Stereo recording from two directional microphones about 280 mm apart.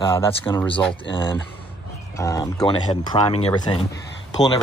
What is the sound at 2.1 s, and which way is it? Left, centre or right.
Speech, centre.